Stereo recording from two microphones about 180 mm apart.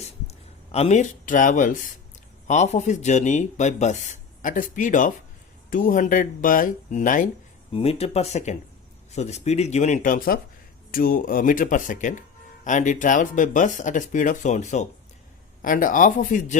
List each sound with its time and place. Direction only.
0.0 s a sound: 35° left (ahead or behind)
2.5 s speech: 40° left (ahead or behind)
7.7 s speech: 35° left (ahead or behind)